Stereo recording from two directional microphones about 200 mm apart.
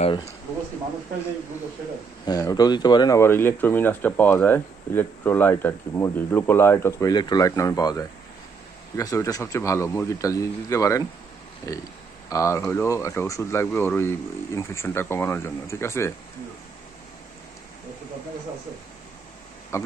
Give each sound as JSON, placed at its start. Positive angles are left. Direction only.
{"t": 0.0, "sound": "speech", "side_deg": 30}
{"t": 2.2, "sound": "speech", "side_deg": 20}
{"t": 19.7, "sound": "speech", "side_deg": 15}